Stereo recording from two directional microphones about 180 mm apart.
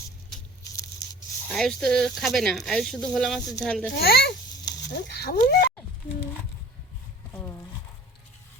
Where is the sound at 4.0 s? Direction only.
60° left (ahead or behind).